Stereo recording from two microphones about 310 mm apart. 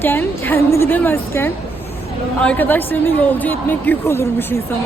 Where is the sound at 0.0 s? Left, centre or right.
Centre.